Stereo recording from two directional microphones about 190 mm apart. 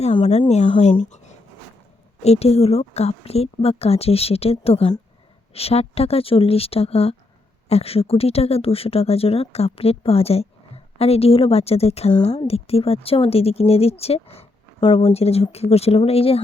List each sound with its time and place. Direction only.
0.0 s speech: 30° left (ahead or behind)